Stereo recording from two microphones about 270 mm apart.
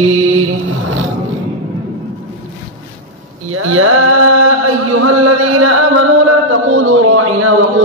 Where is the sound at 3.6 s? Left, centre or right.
Right.